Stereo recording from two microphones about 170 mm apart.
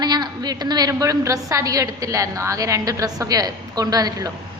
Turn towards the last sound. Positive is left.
turn(degrees=-20)  # may be behind; listen again after turning